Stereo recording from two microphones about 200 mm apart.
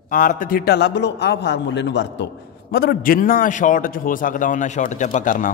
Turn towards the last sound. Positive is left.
turn(degrees=40)  # may be behind; listen again after turning